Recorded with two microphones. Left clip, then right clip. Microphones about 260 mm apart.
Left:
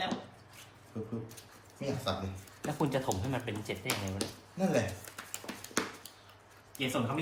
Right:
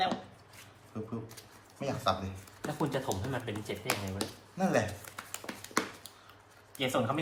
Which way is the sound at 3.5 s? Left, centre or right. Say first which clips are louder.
Right 1 dB; centre.